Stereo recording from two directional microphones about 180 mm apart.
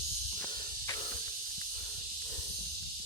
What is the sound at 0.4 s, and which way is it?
Snake, 25° left (ahead or behind).